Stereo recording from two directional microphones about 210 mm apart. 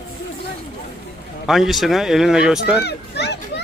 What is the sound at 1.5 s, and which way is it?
Speech, centre (ahead or behind).